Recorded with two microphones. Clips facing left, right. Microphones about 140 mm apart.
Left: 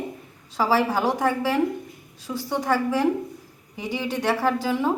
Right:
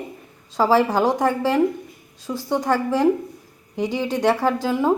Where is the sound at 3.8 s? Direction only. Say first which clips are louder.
Right 5 dB; 15° right (ahead or behind).